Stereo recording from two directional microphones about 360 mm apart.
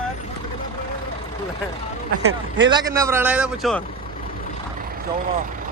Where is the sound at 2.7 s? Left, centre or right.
Centre.